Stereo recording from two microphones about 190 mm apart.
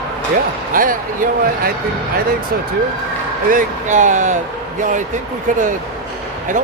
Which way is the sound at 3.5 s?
45° right (ahead or behind).